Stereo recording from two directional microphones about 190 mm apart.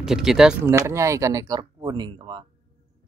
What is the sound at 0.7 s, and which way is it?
Speech, 15° right (ahead or behind).